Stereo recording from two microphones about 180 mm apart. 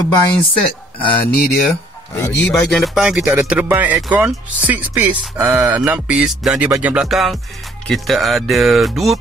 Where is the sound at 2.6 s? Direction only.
Centre (ahead or behind).